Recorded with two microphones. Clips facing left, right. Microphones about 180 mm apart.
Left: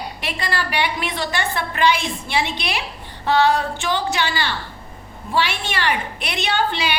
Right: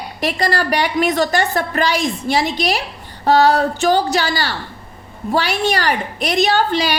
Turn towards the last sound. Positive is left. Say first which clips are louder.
# right 6 dB
turn(degrees=-40)  # may be behind; listen again after turning